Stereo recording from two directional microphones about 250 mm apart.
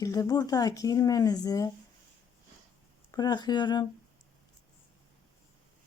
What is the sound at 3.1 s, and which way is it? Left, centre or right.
Speech, centre.